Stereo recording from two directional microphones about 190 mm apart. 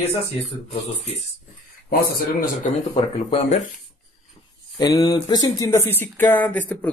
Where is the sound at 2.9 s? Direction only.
30° left (ahead or behind).